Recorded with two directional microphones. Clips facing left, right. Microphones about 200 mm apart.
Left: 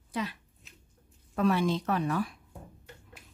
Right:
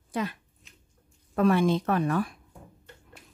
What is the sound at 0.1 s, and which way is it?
Speech, 50° right (ahead or behind).